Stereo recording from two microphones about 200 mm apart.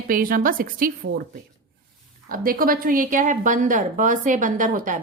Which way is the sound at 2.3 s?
45° right (ahead or behind).